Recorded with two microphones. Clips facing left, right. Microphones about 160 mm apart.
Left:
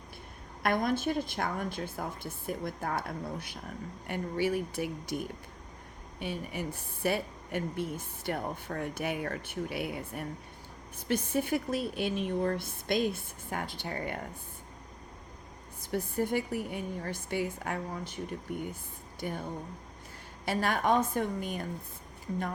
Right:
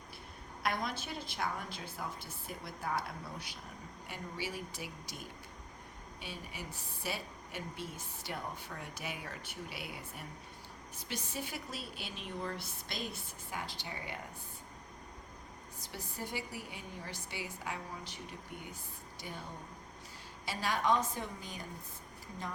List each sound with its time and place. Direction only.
0.6 s a woman's voice: 50° left (ahead or behind)
15.8 s a woman's voice: 55° left (ahead or behind)